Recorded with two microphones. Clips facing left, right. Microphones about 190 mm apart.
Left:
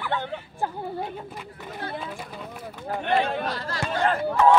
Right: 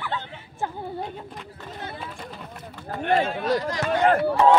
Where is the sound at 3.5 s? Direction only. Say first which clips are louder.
Right 8 dB; 15° right (ahead or behind).